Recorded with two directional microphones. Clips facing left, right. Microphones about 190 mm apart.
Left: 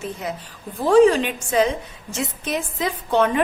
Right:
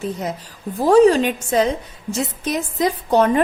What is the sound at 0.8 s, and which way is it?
A woman's voice, 40° right (ahead or behind).